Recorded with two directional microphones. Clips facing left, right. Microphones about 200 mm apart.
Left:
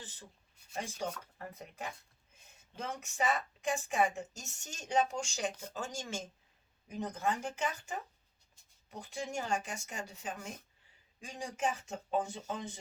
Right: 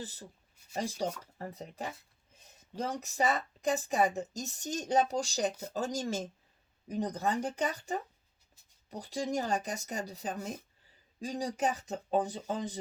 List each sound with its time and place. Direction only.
0.0 s speech: 40° right (ahead or behind)